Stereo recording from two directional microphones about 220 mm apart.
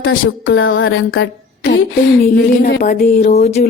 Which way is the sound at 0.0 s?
60° left (ahead or behind).